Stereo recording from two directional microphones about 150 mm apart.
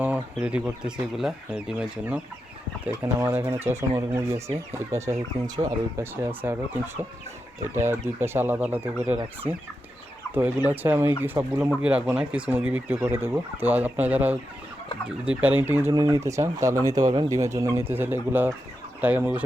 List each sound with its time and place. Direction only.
0.0 s speech: 10° right (ahead or behind)
8.2 s speech: 15° right (ahead or behind)
10.3 s speech: 10° right (ahead or behind)